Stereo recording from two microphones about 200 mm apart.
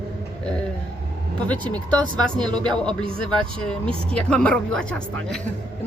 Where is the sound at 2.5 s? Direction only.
25° right (ahead or behind).